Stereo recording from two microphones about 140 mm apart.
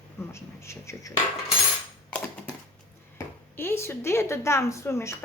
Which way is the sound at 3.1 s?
20° left (ahead or behind).